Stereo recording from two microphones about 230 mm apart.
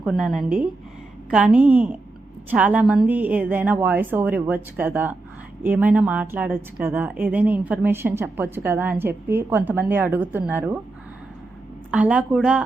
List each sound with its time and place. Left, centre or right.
0.0 s a woman's voice: centre
11.9 s a woman's voice: centre